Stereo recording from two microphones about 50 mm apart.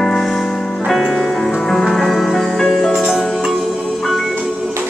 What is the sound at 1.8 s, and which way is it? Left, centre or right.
Music, centre.